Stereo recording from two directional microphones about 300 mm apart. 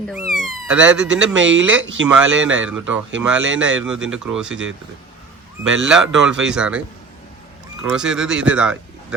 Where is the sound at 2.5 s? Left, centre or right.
Centre.